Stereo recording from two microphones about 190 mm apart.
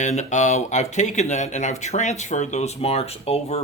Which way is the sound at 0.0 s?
40° left (ahead or behind).